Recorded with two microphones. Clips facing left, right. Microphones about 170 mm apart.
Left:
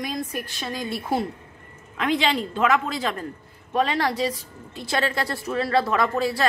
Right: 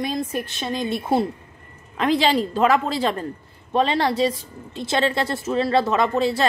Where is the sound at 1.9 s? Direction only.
35° right (ahead or behind).